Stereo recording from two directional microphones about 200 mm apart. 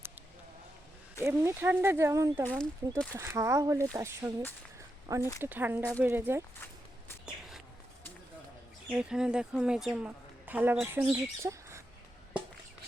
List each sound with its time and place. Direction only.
1.2 s speech: 10° right (ahead or behind)
2.4 s speech: 10° left (ahead or behind)
3.1 s speech: 15° right (ahead or behind)
8.9 s a woman's voice: 5° right (ahead or behind)